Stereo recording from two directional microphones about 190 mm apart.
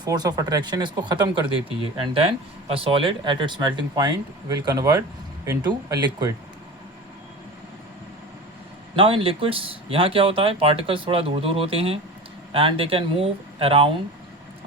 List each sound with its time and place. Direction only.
0.0 s speech: 20° right (ahead or behind)
2.6 s speech: 30° right (ahead or behind)
9.0 s speech: 30° right (ahead or behind)